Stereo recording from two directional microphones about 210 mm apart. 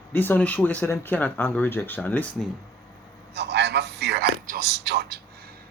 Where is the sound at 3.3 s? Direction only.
55° right (ahead or behind).